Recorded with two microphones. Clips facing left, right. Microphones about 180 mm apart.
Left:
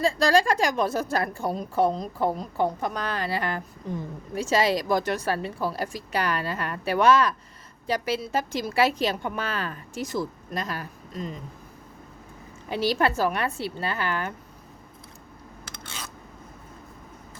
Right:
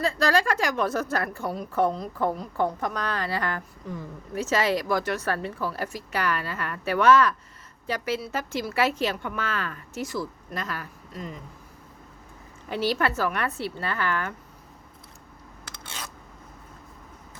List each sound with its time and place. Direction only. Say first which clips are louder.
0.1 s a woman's voice: left 2 dB; 15° left (ahead or behind)
12.6 s a woman's voice: left 2 dB; 15° left (ahead or behind)